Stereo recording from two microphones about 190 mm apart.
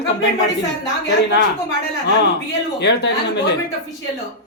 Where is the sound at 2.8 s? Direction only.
65° left (ahead or behind).